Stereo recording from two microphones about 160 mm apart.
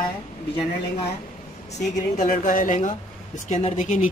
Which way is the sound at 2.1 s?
55° left (ahead or behind).